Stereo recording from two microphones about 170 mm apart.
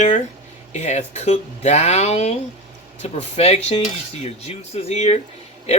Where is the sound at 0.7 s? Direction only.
45° left (ahead or behind).